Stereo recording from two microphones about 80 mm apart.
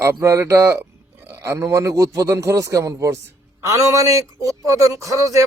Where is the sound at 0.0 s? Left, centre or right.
Right.